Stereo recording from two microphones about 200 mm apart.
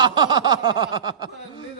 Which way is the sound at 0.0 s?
20° right (ahead or behind).